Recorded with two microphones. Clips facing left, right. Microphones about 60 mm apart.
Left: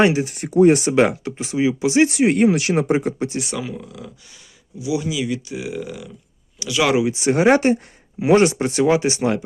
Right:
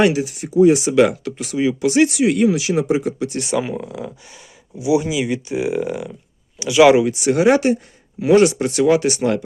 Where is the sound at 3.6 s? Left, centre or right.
Right.